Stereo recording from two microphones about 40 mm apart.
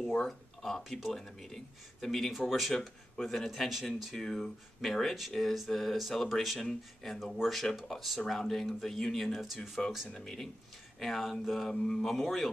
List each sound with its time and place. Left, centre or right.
0.2 s speech: centre
2.3 s speech: centre
4.1 s speech: centre
6.7 s speech: centre
7.2 s speech: centre
9.6 s speech: centre
11.7 s speech: centre
12.1 s speech: centre